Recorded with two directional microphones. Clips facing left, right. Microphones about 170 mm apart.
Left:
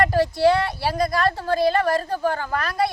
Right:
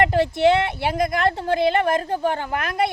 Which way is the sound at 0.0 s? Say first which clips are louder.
Right 1 dB; 25° right (ahead or behind).